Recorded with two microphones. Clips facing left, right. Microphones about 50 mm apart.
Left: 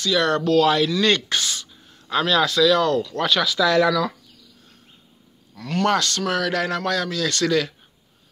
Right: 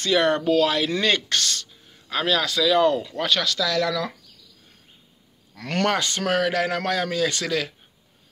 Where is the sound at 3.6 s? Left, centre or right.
Left.